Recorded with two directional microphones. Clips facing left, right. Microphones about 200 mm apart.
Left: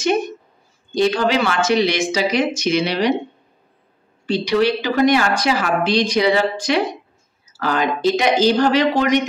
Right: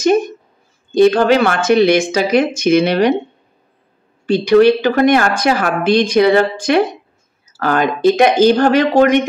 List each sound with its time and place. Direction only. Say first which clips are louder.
0.9 s speech: right 7 dB; 55° right (ahead or behind)
4.3 s speech: right 8 dB; 50° right (ahead or behind)